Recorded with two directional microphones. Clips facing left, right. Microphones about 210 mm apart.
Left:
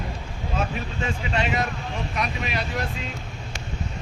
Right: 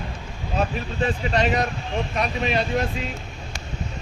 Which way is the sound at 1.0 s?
35° right (ahead or behind).